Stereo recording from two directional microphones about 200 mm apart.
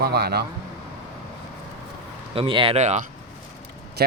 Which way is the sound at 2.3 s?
25° right (ahead or behind).